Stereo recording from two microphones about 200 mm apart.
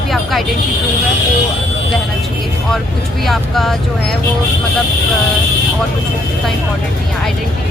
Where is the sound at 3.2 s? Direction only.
Centre (ahead or behind).